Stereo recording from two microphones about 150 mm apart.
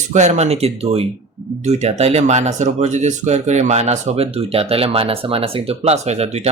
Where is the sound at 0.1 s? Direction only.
50° right (ahead or behind).